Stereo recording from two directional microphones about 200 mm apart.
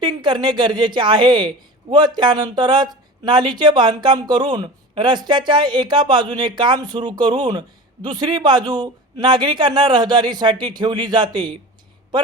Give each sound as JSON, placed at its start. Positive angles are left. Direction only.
{"t": 0.0, "sound": "a woman's voice", "side_deg": -20}